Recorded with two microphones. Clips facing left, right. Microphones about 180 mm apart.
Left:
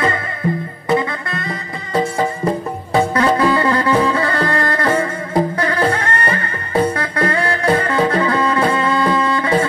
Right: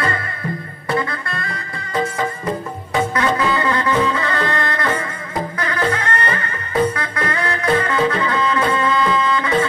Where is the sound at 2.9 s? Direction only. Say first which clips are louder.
Left 4 dB; 30° left (ahead or behind).